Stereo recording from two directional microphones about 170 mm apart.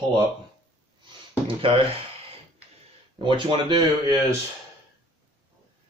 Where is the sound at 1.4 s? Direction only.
30° right (ahead or behind).